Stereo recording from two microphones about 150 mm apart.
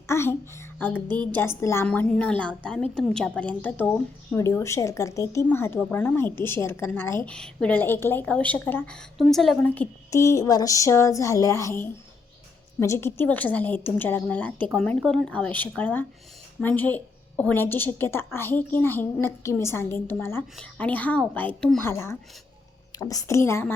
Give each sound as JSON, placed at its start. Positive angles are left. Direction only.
{"t": 0.1, "sound": "a child's voice", "side_deg": 15}
{"t": 1.9, "sound": "a woman's voice", "side_deg": 5}
{"t": 7.3, "sound": "a woman's voice", "side_deg": 5}
{"t": 9.7, "sound": "a woman's voice", "side_deg": 15}